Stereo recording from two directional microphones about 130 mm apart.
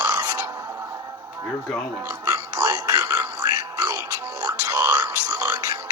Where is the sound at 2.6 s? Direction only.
30° right (ahead or behind).